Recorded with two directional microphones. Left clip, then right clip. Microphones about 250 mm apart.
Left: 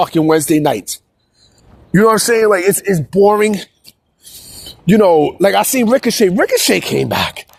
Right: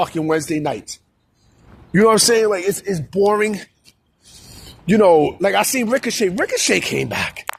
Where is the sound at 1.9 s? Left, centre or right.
Left.